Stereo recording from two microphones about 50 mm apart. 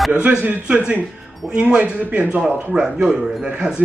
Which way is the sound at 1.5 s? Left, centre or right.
Right.